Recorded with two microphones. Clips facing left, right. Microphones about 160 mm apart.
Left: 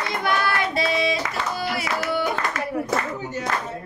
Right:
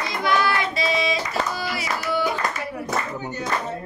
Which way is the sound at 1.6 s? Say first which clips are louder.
Left 2 dB; 55° left (ahead or behind).